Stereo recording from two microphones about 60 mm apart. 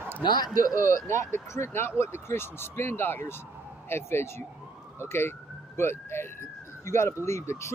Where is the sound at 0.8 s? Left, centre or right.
Left.